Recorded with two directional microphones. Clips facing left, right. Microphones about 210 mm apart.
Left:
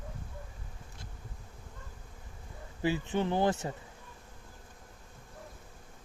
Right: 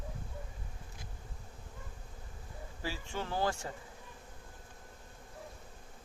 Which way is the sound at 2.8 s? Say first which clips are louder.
Left 10 dB; 20° left (ahead or behind).